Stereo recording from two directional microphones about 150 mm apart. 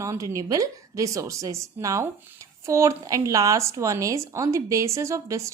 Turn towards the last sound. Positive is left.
turn(degrees=-20)  # may be behind; listen again after turning